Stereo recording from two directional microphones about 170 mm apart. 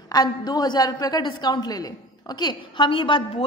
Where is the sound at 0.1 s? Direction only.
25° left (ahead or behind).